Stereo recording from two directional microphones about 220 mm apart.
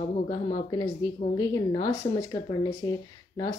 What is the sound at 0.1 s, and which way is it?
Speech, 25° left (ahead or behind).